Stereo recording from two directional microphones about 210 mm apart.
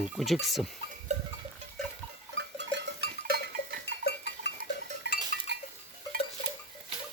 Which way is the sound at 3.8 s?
55° left (ahead or behind).